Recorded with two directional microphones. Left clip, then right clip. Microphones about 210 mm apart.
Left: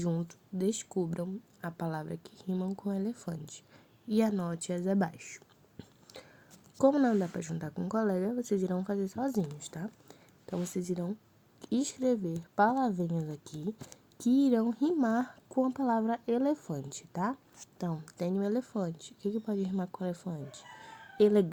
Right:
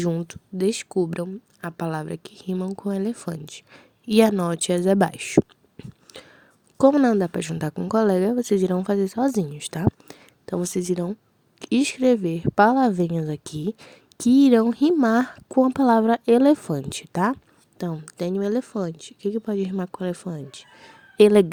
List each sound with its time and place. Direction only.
0.0 s speech: 45° right (ahead or behind)
5.8 s a sound: 45° right (ahead or behind)
6.7 s speech: 45° right (ahead or behind)
7.3 s speech: 90° right
7.8 s a woman's voice: 50° right (ahead or behind)
17.7 s a woman's voice: 75° right (ahead or behind)
18.0 s speech: 45° right (ahead or behind)